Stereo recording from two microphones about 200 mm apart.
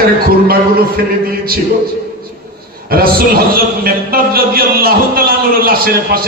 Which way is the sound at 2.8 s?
50° right (ahead or behind).